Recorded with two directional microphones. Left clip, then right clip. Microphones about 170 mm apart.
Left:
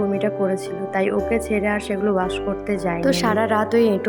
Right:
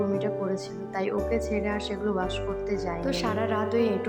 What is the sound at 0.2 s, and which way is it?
Speech, 30° left (ahead or behind).